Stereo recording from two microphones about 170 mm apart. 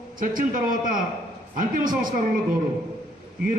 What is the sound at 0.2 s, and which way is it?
A man's voice, 55° right (ahead or behind).